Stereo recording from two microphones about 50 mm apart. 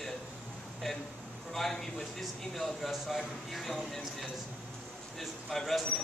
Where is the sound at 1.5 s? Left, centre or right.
Centre.